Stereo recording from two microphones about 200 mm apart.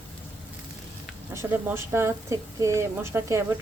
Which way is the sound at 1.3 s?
10° right (ahead or behind).